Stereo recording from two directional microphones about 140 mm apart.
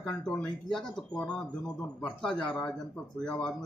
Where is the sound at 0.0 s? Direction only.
5° left (ahead or behind).